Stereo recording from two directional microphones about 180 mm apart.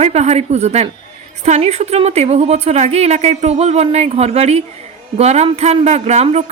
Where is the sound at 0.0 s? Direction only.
40° right (ahead or behind).